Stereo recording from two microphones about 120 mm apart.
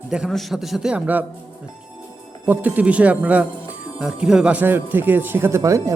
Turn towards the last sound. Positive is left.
turn(degrees=-25)  # may be behind; listen again after turning